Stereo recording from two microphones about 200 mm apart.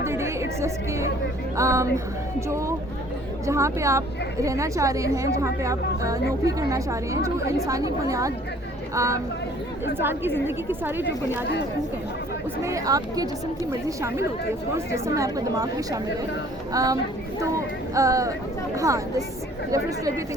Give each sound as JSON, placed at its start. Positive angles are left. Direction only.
{"t": 0.0, "sound": "chatter", "side_deg": -15}
{"t": 1.5, "sound": "a woman's voice", "side_deg": -15}
{"t": 12.6, "sound": "a woman's voice", "side_deg": -15}